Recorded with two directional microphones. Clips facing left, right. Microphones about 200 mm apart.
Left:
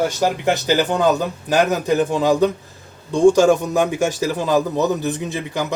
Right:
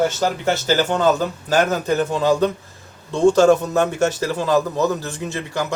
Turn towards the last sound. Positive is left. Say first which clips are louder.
# left 1 dB
turn(degrees=15)  # may be behind; listen again after turning